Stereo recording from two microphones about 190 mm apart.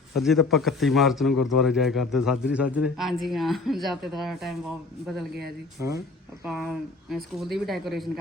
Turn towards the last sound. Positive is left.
turn(degrees=0)  # may be behind; listen again after turning